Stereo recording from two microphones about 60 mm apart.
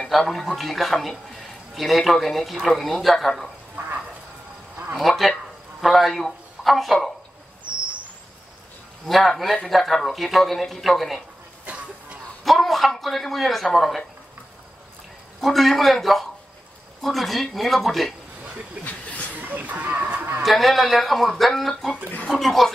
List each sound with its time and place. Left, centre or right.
0.2 s speech: centre
4.9 s speech: centre
9.0 s speech: centre
11.6 s a sound: right
12.4 s speech: centre
15.4 s speech: centre
18.9 s a sound: left
19.4 s a sound: right
20.4 s speech: centre